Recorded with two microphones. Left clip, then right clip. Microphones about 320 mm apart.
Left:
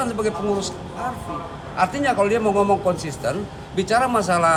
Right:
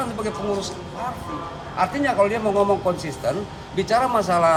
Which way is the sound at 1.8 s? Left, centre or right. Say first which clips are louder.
Even; centre.